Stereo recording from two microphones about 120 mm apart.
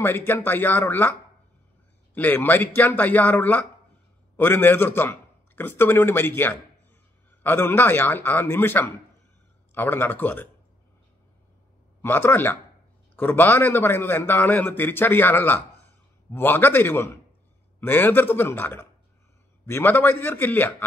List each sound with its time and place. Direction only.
0.0 s a man's voice: 20° left (ahead or behind)
2.1 s a man's voice: 15° left (ahead or behind)
12.0 s a man's voice: 20° left (ahead or behind)